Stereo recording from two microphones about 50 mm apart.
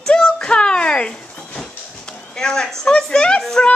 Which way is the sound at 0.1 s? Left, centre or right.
Centre.